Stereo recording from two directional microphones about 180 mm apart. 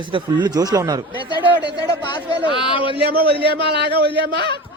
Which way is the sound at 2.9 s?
60° right (ahead or behind).